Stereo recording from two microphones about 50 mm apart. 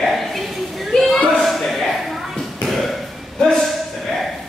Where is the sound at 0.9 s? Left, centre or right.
Centre.